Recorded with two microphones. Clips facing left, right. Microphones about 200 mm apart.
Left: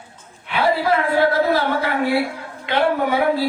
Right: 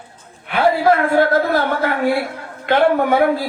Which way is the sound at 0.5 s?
50° right (ahead or behind).